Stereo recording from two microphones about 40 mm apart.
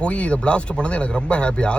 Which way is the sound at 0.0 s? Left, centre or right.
Left.